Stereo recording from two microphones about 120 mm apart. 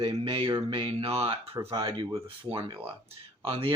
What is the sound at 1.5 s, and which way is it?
Speech, 30° right (ahead or behind).